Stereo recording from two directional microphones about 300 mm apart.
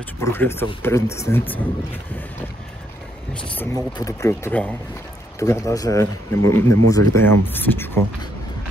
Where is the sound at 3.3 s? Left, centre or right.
Centre.